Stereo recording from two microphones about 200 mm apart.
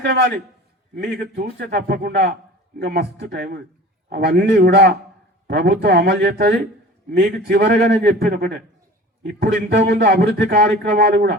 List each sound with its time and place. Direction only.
0.0 s a man's voice: 55° right (ahead or behind)